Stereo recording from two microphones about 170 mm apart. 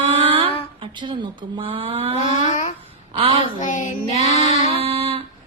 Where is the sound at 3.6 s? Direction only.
45° left (ahead or behind).